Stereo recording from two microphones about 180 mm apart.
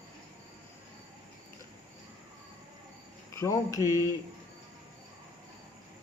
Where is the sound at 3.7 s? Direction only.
15° right (ahead or behind).